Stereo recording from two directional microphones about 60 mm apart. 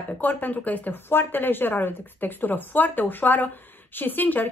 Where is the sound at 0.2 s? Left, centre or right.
Left.